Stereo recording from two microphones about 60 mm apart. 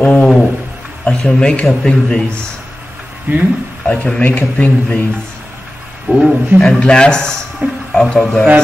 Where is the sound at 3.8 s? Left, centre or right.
Left.